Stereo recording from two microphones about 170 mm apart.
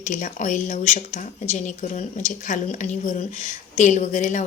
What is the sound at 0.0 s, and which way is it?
Speech, 45° left (ahead or behind).